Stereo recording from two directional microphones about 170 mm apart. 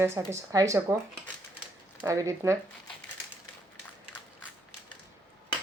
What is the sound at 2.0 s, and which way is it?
Speech, 15° right (ahead or behind).